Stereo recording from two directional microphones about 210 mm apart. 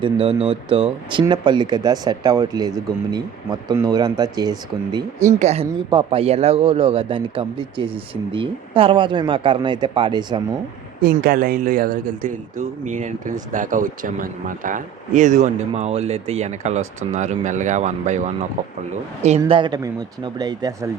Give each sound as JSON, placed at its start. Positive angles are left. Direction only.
{"t": 0.0, "sound": "speech", "side_deg": -25}
{"t": 5.3, "sound": "speech", "side_deg": -30}
{"t": 11.0, "sound": "speech", "side_deg": -45}
{"t": 19.4, "sound": "speech", "side_deg": -20}